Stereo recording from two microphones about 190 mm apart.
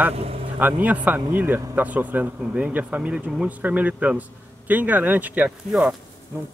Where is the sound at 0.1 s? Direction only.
30° right (ahead or behind).